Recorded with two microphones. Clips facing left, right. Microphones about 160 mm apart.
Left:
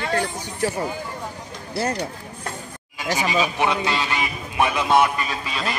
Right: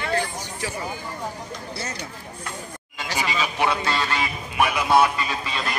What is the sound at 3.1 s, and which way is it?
A man's voice, 15° left (ahead or behind).